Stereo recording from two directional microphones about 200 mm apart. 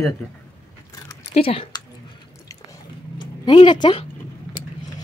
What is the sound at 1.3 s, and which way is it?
Speech, 30° left (ahead or behind).